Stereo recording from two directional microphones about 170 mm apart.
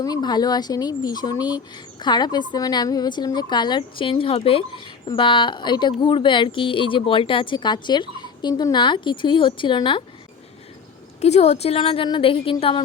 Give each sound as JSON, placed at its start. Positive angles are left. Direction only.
{"t": 0.0, "sound": "speech", "side_deg": 25}
{"t": 11.2, "sound": "a woman's voice", "side_deg": 40}